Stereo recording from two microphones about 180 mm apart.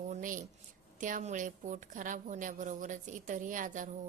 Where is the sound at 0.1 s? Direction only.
45° right (ahead or behind).